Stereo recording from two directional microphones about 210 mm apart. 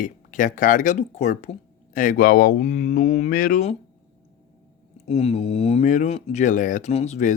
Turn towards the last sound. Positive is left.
turn(degrees=35)  # may be behind; listen again after turning